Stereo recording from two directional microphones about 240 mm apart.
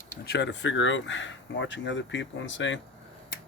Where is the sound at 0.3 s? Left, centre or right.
Left.